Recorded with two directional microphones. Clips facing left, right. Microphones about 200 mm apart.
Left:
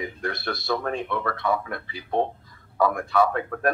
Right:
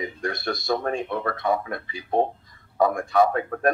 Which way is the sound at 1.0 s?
25° right (ahead or behind).